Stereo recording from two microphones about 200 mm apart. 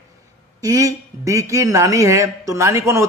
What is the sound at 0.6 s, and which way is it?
Speech, 15° right (ahead or behind).